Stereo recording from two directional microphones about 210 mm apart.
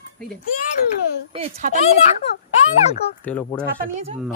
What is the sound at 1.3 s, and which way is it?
Speech, 35° right (ahead or behind).